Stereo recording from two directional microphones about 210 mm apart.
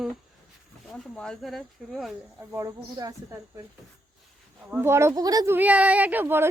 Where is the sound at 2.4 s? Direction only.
15° right (ahead or behind).